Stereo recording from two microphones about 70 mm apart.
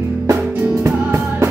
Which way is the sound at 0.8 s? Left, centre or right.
Right.